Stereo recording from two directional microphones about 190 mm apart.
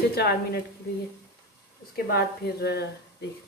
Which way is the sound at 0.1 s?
55° left (ahead or behind).